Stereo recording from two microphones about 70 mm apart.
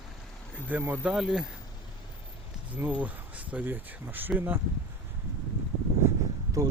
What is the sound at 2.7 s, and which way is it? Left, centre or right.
Speech, right.